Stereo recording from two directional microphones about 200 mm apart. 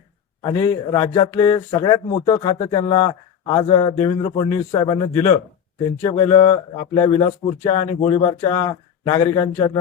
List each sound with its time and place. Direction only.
0.4 s speech: 20° left (ahead or behind)